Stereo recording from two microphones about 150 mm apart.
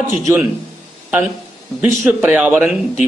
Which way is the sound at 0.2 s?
15° right (ahead or behind).